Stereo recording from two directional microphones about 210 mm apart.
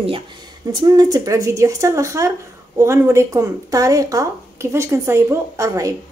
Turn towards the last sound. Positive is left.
turn(degrees=-15)  # may be behind; listen again after turning